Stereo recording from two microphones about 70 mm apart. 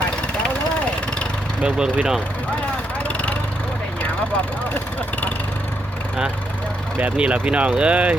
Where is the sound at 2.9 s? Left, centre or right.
Centre.